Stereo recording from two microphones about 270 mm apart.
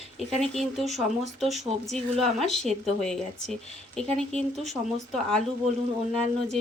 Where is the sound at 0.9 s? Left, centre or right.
Right.